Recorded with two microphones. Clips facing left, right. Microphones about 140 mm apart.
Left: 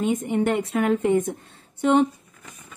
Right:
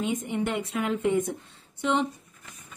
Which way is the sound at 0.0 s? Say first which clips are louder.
Left 6 dB; 50° left (ahead or behind).